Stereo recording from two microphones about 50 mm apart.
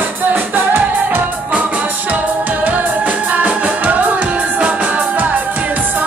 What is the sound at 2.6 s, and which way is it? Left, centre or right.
Music, right.